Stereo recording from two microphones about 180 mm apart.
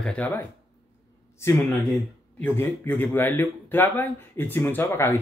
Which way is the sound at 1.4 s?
15° left (ahead or behind).